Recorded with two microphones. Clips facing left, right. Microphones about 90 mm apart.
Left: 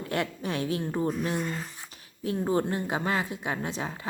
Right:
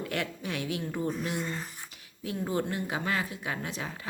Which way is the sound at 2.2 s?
35° left (ahead or behind).